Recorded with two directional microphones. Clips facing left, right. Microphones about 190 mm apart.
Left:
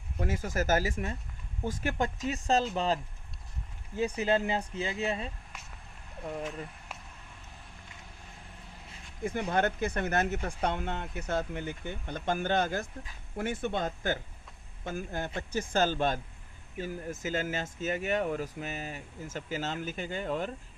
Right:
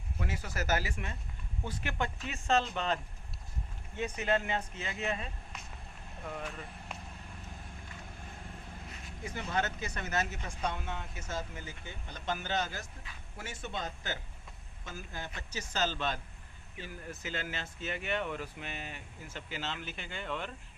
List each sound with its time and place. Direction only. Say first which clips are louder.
0.2 s speech: left 7 dB; 45° left (ahead or behind); by 5.3 s 30° left (ahead or behind)
9.2 s speech: left 6 dB; 55° left (ahead or behind)